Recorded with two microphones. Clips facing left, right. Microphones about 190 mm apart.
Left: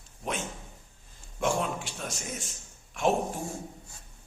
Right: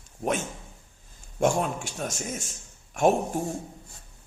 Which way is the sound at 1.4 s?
45° right (ahead or behind).